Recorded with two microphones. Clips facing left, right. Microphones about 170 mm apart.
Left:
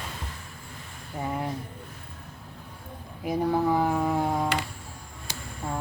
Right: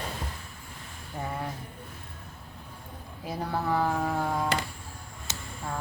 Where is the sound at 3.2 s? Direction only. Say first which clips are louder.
Left 7 dB; 15° left (ahead or behind).